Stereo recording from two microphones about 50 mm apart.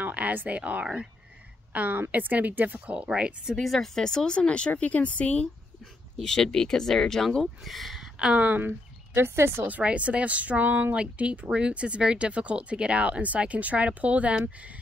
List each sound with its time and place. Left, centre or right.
0.0 s a woman's voice: right
3.5 s speech: centre; by 5.5 s left
6.1 s speech: centre
8.2 s speech: centre
8.5 s speech: right
9.7 s speech: right